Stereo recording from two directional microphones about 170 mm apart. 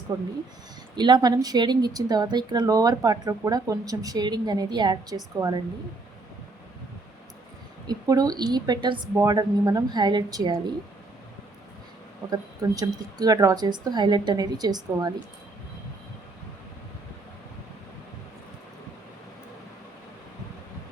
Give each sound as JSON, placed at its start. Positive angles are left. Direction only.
{"t": 0.1, "sound": "a woman's voice", "side_deg": -25}
{"t": 7.9, "sound": "a woman's voice", "side_deg": -20}
{"t": 12.3, "sound": "a woman's voice", "side_deg": -20}